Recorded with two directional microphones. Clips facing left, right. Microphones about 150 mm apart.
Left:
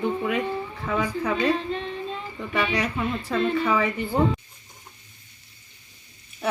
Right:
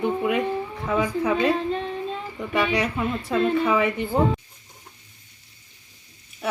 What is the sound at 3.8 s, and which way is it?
Speech, 20° right (ahead or behind).